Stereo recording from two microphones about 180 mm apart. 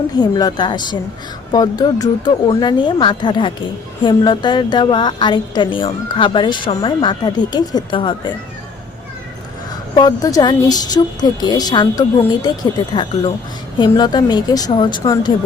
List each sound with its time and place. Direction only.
0.2 s a woman's voice: 20° left (ahead or behind)
9.9 s a woman's voice: 25° left (ahead or behind)